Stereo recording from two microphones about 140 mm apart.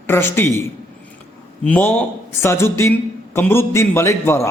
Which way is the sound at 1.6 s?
10° left (ahead or behind).